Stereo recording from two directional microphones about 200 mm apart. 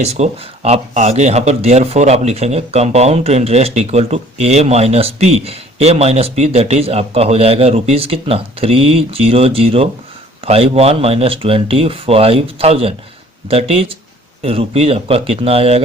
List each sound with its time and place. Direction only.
0.1 s speech: 30° right (ahead or behind)